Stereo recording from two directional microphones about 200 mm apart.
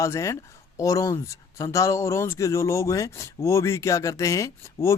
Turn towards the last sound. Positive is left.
turn(degrees=15)  # may be behind; listen again after turning